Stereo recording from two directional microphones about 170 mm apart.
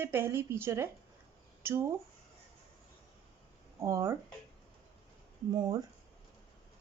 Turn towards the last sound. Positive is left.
turn(degrees=-25)  # may be behind; listen again after turning